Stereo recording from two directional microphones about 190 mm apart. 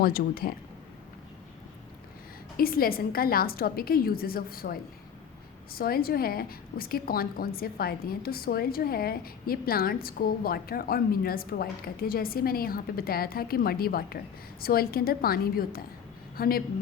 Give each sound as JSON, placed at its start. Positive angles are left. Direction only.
{"t": 0.0, "sound": "a woman's voice", "side_deg": 50}
{"t": 2.6, "sound": "a woman's voice", "side_deg": 50}